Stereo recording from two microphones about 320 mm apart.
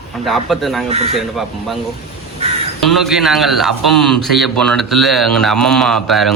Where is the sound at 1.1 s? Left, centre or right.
Centre.